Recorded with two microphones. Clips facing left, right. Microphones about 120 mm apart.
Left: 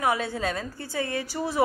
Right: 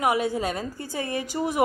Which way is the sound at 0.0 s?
15° right (ahead or behind).